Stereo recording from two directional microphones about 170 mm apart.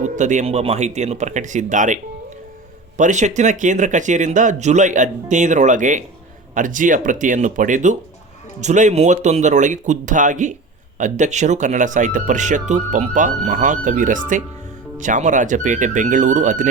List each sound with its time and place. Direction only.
0.0 s speech: 45° right (ahead or behind)
3.0 s speech: 45° right (ahead or behind)